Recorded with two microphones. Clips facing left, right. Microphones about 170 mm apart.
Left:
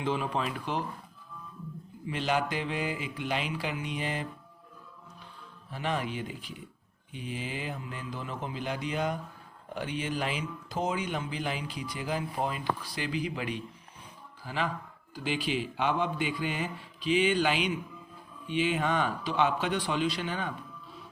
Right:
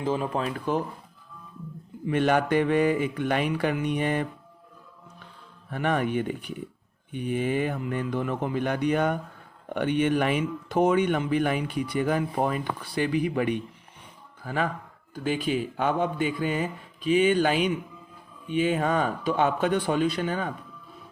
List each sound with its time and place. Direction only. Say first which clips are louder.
0.0 s a man's voice: right 4 dB; 40° right (ahead or behind)
2.0 s speech: right 7 dB; 55° right (ahead or behind)
5.7 s a man's voice: right 7 dB; 60° right (ahead or behind)